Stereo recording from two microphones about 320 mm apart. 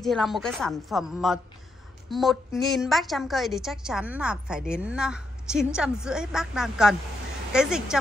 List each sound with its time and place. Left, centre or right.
0.0 s a woman's voice: centre